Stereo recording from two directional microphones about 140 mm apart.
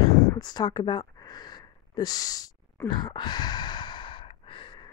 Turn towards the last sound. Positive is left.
turn(degrees=35)  # may be behind; listen again after turning